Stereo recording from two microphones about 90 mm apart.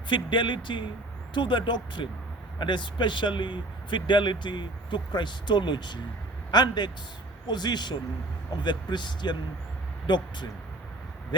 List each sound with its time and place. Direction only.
0.1 s a man's voice: 60° left (ahead or behind)